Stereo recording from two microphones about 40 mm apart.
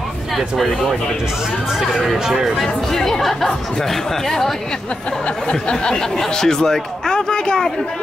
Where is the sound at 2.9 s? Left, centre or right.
Centre.